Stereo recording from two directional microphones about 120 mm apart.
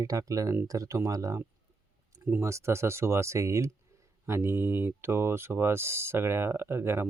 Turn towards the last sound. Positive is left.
turn(degrees=-20)  # may be behind; listen again after turning